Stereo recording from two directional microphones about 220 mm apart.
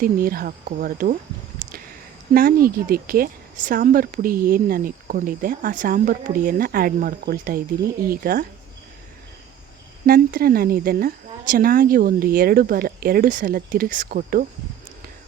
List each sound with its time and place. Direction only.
0.0 s speech: 40° right (ahead or behind)
2.3 s speech: 40° right (ahead or behind)
10.1 s speech: 40° right (ahead or behind)